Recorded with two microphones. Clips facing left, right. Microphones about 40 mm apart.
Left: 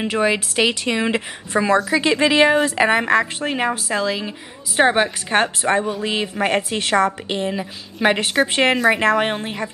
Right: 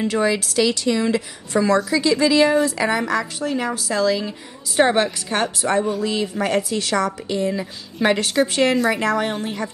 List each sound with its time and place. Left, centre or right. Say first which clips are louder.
0.1 s a woman's voice: left 1 dB; left
5.3 s a woman's voice: left 3 dB; left
7.5 s a woman's voice: even; left